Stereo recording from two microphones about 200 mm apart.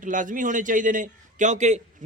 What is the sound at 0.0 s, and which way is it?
A man's voice, 40° right (ahead or behind).